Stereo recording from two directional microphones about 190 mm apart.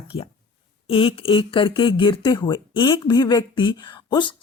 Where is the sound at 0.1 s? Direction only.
35° left (ahead or behind).